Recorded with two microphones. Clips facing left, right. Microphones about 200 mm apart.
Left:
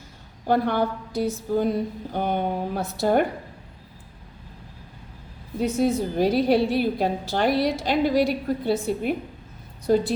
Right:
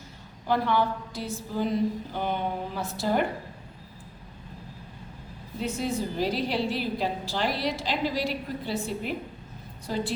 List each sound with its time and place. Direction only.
0.4 s a woman's voice: 50° left (ahead or behind)
5.5 s a woman's voice: 55° left (ahead or behind)